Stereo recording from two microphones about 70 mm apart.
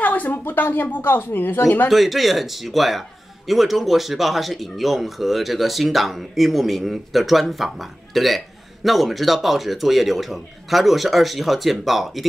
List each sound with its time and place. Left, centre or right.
0.0 s a woman's voice: left
1.9 s speech: centre